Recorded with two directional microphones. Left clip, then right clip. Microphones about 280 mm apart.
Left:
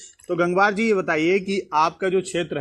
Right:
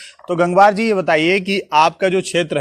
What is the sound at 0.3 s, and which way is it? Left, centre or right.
A man's voice, right.